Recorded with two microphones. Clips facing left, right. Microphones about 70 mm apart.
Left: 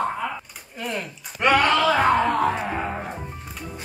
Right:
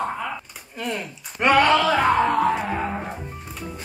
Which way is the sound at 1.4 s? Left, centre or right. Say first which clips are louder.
Right 1 dB; centre.